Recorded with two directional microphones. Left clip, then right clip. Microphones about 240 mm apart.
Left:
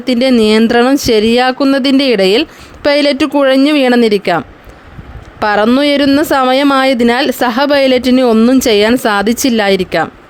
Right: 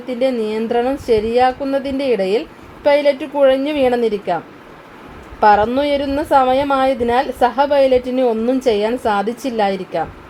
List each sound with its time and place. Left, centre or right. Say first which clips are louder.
0.0 s speech: left 8 dB; left
5.4 s speech: left 2 dB; left